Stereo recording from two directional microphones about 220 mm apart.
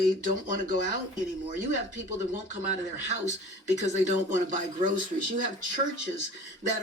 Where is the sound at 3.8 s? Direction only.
30° right (ahead or behind).